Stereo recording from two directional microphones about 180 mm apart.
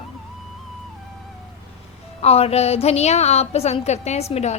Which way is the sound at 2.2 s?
35° left (ahead or behind).